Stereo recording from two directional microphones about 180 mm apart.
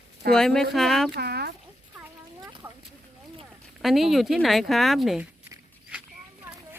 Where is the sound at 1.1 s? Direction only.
65° right (ahead or behind).